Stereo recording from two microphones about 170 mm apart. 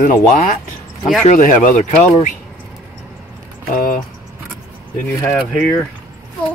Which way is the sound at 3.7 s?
55° left (ahead or behind).